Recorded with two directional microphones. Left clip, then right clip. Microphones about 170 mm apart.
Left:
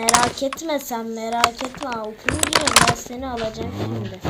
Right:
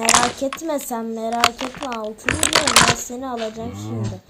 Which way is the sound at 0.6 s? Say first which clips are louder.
Even; 45° right (ahead or behind).